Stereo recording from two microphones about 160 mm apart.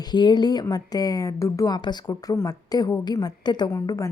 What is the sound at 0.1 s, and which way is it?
Speech, 25° left (ahead or behind).